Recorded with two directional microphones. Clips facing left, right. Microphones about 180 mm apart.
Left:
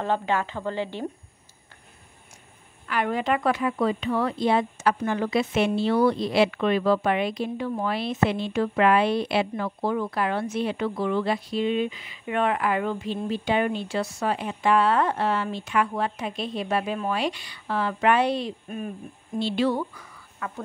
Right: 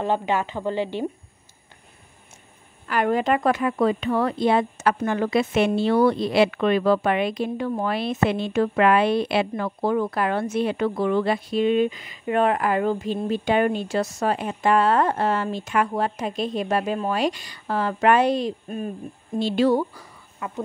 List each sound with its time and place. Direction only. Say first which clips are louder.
0.0 s speech: right 2 dB; 15° right (ahead or behind)
2.9 s speech: right 4 dB; 45° right (ahead or behind)
20.3 s speech: right 4 dB; 20° right (ahead or behind)